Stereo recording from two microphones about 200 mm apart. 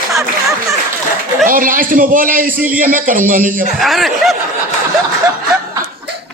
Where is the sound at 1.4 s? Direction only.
45° right (ahead or behind).